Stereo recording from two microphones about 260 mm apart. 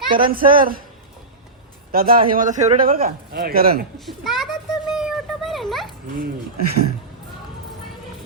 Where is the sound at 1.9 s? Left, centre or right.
Right.